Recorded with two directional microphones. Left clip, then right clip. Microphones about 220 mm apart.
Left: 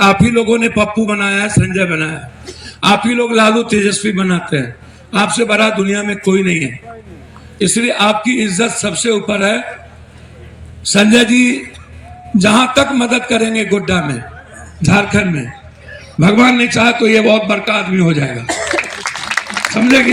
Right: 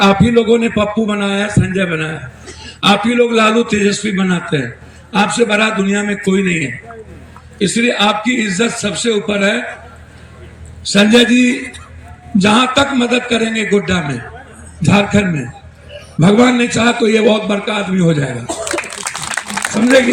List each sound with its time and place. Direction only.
0.0 s a man's voice: 55° left (ahead or behind)
10.8 s a man's voice: 55° left (ahead or behind)
19.8 s a man's voice: 55° left (ahead or behind)